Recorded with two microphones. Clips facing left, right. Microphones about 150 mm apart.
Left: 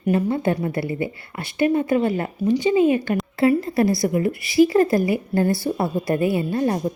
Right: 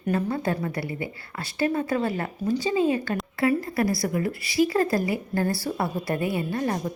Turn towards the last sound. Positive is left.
turn(degrees=25)  # may be behind; listen again after turning